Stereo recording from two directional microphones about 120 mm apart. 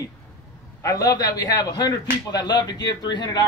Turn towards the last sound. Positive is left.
turn(degrees=35)  # may be behind; listen again after turning